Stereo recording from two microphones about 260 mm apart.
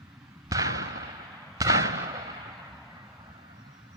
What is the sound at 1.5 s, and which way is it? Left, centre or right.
Fireworks, centre.